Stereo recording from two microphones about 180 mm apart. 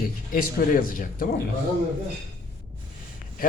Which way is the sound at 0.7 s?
50° left (ahead or behind).